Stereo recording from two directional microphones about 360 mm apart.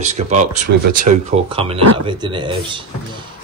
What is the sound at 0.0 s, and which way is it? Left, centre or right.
A man's voice, centre.